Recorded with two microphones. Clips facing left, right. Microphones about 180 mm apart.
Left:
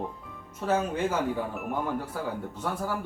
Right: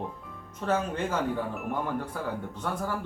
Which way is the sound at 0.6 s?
5° left (ahead or behind).